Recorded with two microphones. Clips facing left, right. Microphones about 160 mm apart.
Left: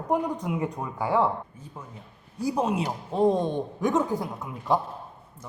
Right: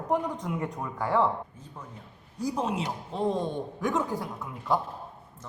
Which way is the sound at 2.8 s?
40° left (ahead or behind).